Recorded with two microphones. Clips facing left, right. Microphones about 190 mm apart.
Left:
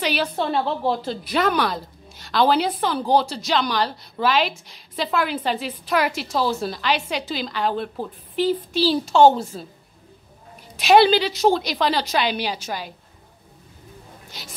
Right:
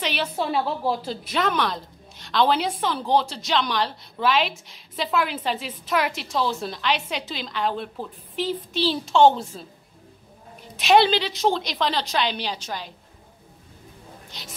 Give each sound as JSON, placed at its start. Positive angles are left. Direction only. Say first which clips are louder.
{"t": 0.0, "sound": "a woman's voice", "louder": "left 3 dB", "side_deg": 0}
{"t": 10.8, "sound": "a woman's voice", "louder": "left 3 dB", "side_deg": 5}
{"t": 14.3, "sound": "speech", "louder": "left 3 dB", "side_deg": 5}